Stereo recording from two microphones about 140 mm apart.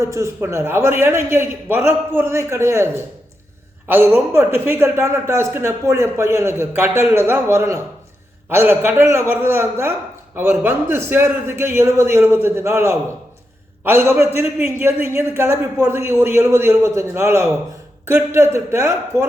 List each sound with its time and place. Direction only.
0.0 s a man's voice: 20° right (ahead or behind)